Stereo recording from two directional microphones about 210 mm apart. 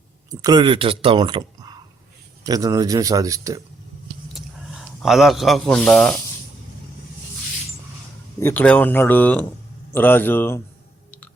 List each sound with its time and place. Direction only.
0.3 s a man's voice: 20° right (ahead or behind)
4.4 s speech: centre (ahead or behind)
8.4 s speech: 10° left (ahead or behind)